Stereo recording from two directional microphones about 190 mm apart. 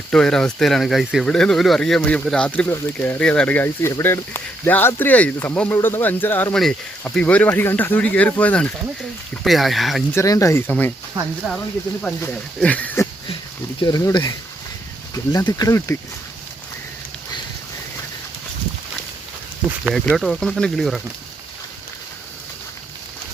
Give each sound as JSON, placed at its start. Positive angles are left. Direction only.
{"t": 0.1, "sound": "speech", "side_deg": 5}
{"t": 10.2, "sound": "speech", "side_deg": 15}
{"t": 11.4, "sound": "speech", "side_deg": -5}
{"t": 12.0, "sound": "speech", "side_deg": 5}
{"t": 13.8, "sound": "speech", "side_deg": 20}
{"t": 19.8, "sound": "speech", "side_deg": 0}